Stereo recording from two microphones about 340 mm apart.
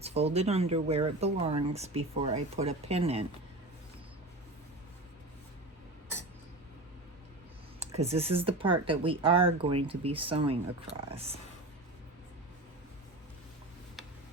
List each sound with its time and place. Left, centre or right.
0.0 s speech: centre
7.8 s speech: centre